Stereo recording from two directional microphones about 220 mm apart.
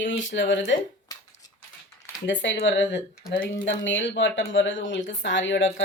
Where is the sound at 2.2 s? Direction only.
55° left (ahead or behind).